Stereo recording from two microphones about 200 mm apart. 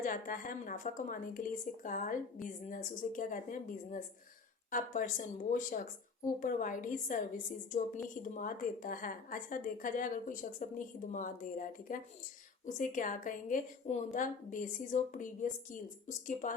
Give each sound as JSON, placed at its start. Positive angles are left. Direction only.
{"t": 0.0, "sound": "a woman's voice", "side_deg": 45}